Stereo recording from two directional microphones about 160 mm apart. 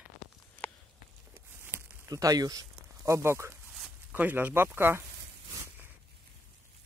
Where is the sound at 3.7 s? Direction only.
5° right (ahead or behind).